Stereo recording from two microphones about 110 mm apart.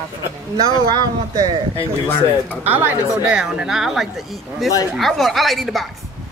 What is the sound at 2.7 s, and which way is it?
Speech, 15° right (ahead or behind).